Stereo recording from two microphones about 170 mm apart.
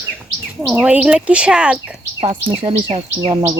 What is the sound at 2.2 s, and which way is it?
Speech, 35° right (ahead or behind).